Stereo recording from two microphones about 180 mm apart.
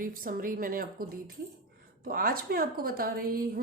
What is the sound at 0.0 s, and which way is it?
A woman's voice, 50° right (ahead or behind).